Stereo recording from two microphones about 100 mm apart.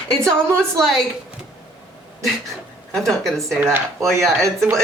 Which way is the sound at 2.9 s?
Centre (ahead or behind).